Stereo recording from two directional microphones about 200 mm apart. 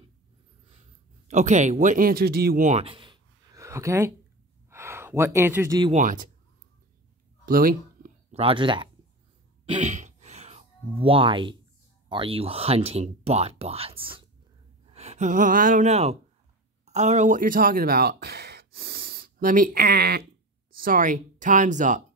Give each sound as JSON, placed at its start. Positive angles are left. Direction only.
{"t": 1.3, "sound": "speech", "side_deg": -35}
{"t": 5.9, "sound": "speech", "side_deg": -40}
{"t": 7.4, "sound": "a sound", "side_deg": -45}
{"t": 8.4, "sound": "speech", "side_deg": -25}
{"t": 9.7, "sound": "a sound", "side_deg": -35}
{"t": 12.1, "sound": "speech", "side_deg": -25}